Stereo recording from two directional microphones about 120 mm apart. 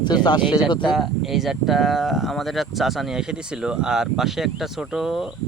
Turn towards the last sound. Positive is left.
turn(degrees=-5)  # may be behind; listen again after turning